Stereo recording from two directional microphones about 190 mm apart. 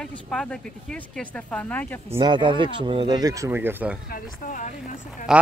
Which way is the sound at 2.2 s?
25° right (ahead or behind).